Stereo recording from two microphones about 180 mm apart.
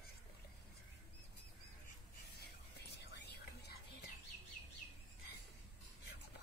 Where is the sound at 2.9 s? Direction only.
70° left (ahead or behind).